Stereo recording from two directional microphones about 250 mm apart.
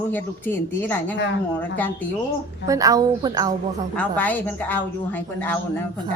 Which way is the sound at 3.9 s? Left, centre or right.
Centre.